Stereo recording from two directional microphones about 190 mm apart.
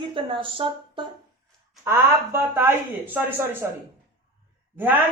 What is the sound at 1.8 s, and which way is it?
Speech, 10° right (ahead or behind).